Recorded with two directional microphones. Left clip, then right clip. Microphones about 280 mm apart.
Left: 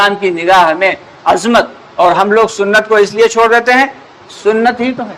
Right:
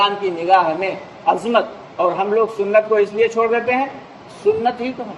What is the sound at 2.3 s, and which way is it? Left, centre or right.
A man's voice, left.